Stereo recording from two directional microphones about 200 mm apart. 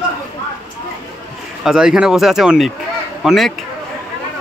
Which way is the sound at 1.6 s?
Centre (ahead or behind).